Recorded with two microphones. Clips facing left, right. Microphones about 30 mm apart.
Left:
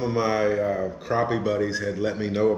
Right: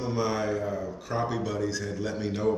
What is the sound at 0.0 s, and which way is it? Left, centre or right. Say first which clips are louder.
A man's voice: left 6 dB; left.